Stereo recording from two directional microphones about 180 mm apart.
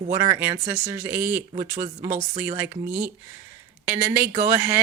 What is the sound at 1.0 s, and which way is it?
Speech, 10° right (ahead or behind).